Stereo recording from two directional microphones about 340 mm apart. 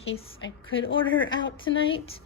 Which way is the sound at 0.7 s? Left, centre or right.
Left.